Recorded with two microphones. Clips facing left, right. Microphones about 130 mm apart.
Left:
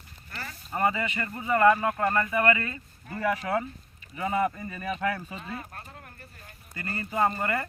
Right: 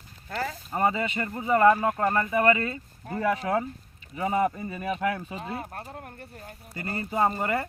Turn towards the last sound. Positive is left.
turn(degrees=-15)  # may be behind; listen again after turning